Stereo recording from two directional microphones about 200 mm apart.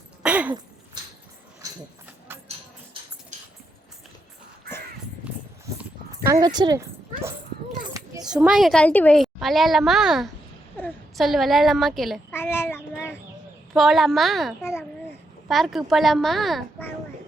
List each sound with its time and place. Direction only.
0.2 s a sound: 5° right (ahead or behind)
1.6 s livestock: 15° right (ahead or behind)
5.2 s a sound: 5° right (ahead or behind)
6.2 s speech: 20° right (ahead or behind)
8.2 s a woman's voice: 5° right (ahead or behind)
10.8 s a woman's voice: 10° left (ahead or behind)
12.3 s child singing: 10° left (ahead or behind)
13.7 s a woman's voice: centre (ahead or behind)
14.6 s a child's voice: 10° left (ahead or behind)
15.4 s a woman's voice: centre (ahead or behind)